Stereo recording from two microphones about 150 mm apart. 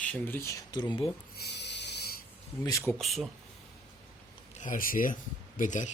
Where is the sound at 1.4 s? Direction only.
90° left.